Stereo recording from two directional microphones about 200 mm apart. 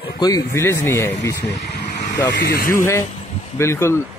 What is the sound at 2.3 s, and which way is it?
Speech, 60° left (ahead or behind).